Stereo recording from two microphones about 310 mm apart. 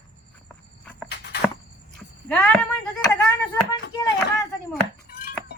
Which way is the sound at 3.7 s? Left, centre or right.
Centre.